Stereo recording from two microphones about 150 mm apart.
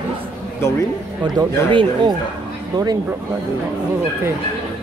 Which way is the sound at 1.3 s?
30° right (ahead or behind).